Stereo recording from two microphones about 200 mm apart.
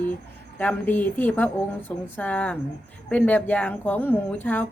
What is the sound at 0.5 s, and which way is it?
Speech, 10° left (ahead or behind).